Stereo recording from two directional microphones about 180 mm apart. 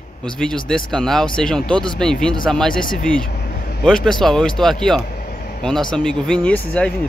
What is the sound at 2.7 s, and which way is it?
Speech, 50° left (ahead or behind).